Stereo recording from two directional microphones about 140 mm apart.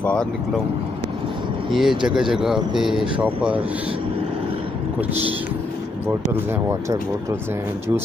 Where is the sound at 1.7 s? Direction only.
Centre (ahead or behind).